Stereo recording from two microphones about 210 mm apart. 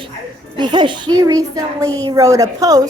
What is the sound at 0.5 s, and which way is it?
A woman's voice, 20° right (ahead or behind).